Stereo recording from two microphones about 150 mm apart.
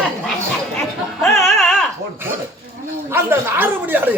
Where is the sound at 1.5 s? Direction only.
Centre (ahead or behind).